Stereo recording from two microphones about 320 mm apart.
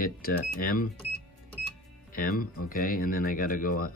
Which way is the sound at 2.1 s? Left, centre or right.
Left.